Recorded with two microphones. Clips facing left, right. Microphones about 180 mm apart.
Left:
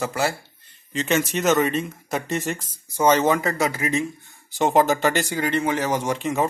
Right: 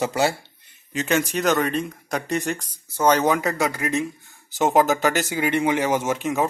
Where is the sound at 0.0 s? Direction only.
20° right (ahead or behind).